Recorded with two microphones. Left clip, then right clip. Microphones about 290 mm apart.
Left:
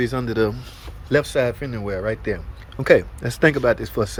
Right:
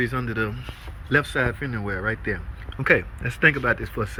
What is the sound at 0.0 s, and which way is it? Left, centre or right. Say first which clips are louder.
A man's voice: left 4 dB; centre.